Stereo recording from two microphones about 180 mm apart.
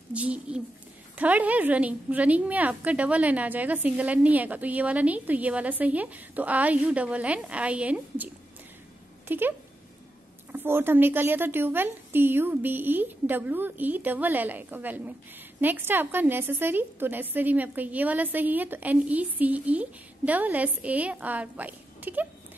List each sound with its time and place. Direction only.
0.1 s a woman's voice: 5° right (ahead or behind)
9.3 s a woman's voice: 10° right (ahead or behind)
10.5 s a woman's voice: 10° right (ahead or behind)